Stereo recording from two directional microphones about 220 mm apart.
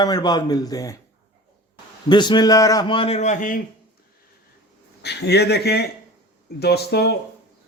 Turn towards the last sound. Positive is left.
turn(degrees=45)  # may be behind; listen again after turning